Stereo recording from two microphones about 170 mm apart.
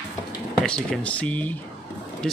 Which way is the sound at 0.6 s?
5° left (ahead or behind).